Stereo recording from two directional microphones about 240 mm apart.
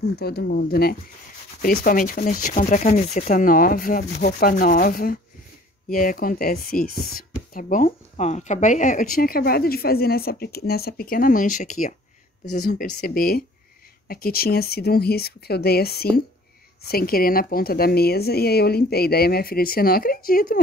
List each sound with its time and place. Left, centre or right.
0.0 s speech: left